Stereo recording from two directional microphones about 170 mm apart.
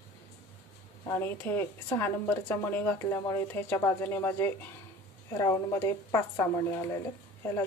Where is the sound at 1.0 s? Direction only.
15° left (ahead or behind).